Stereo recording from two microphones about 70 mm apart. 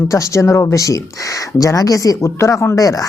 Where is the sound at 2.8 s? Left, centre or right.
Left.